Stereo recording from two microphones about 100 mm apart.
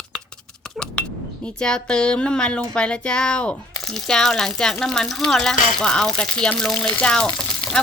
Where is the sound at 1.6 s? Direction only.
10° left (ahead or behind).